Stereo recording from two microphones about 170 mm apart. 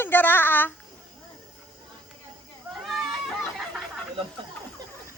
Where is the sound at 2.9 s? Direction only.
Centre (ahead or behind).